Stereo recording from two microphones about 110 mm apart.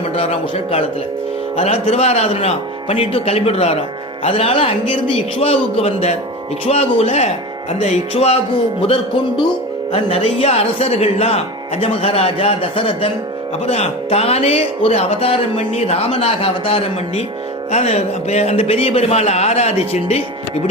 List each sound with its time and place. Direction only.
0.2 s speech: 65° left (ahead or behind)
9.9 s speech: 60° left (ahead or behind)
13.7 s speech: 70° left (ahead or behind)
17.7 s speech: 85° left